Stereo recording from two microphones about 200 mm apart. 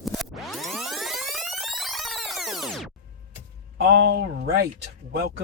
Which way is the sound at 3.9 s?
60° right (ahead or behind).